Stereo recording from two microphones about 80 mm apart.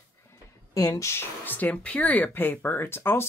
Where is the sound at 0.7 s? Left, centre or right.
Left.